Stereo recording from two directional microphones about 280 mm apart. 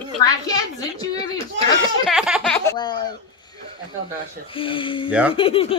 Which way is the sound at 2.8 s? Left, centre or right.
Centre.